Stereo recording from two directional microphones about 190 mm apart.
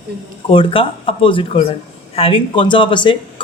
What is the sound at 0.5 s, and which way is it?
A man's voice, 30° left (ahead or behind).